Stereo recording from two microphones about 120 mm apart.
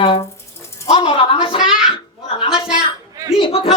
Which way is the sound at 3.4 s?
50° left (ahead or behind).